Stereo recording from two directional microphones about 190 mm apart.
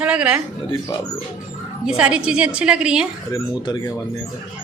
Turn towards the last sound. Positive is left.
turn(degrees=20)  # may be behind; listen again after turning